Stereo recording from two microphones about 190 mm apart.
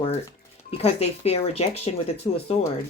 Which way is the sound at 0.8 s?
30° left (ahead or behind).